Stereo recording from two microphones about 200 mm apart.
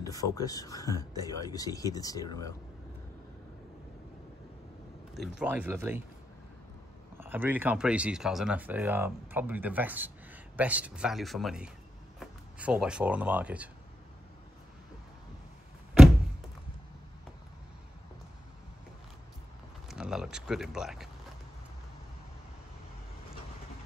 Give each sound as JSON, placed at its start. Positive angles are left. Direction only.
{"t": 0.0, "sound": "speech", "side_deg": 15}
{"t": 5.1, "sound": "speech", "side_deg": 0}
{"t": 7.2, "sound": "speech", "side_deg": -10}
{"t": 19.9, "sound": "a sound", "side_deg": -5}